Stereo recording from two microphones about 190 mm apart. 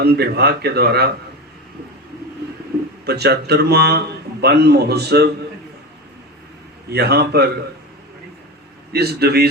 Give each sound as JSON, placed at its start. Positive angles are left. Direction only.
{"t": 0.0, "sound": "speech", "side_deg": -60}
{"t": 3.1, "sound": "speech", "side_deg": -60}
{"t": 6.9, "sound": "speech", "side_deg": -60}
{"t": 8.9, "sound": "speech", "side_deg": -55}